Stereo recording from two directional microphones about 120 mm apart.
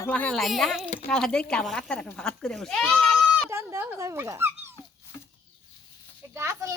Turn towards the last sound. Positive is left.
turn(degrees=-25)  # may be behind; listen again after turning